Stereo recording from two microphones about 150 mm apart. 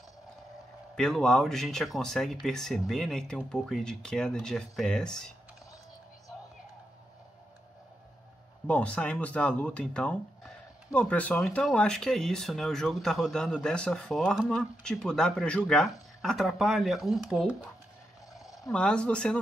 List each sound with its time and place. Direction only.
0.9 s speech: 5° left (ahead or behind)
8.6 s speech: 10° left (ahead or behind)